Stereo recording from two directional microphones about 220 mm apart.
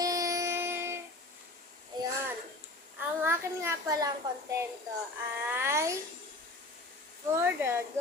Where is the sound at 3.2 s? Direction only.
10° right (ahead or behind).